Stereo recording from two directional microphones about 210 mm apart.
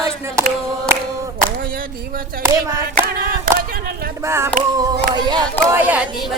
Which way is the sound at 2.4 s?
15° right (ahead or behind).